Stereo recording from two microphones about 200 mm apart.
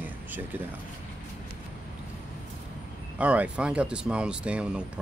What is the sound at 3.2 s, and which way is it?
Speech, 5° right (ahead or behind).